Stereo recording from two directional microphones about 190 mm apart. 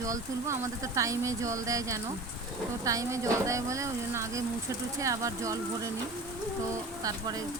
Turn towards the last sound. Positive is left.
turn(degrees=-20)  # may be behind; listen again after turning